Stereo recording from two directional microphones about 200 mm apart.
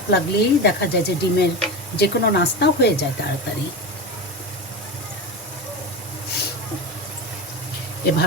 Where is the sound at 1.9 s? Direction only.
55° left (ahead or behind).